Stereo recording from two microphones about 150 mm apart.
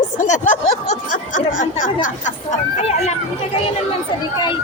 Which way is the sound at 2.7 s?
45° left (ahead or behind).